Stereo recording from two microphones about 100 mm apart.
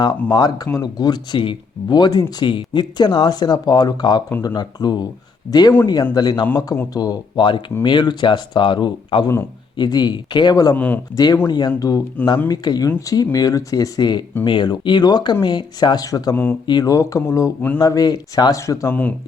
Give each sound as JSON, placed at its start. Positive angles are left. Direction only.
{"t": 0.0, "sound": "speech", "side_deg": 45}
{"t": 10.8, "sound": "speech", "side_deg": 15}
{"t": 11.1, "sound": "speech", "side_deg": 40}
{"t": 16.3, "sound": "speech", "side_deg": 20}
{"t": 16.6, "sound": "speech", "side_deg": 40}